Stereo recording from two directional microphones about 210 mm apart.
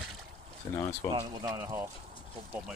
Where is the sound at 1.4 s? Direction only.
15° right (ahead or behind).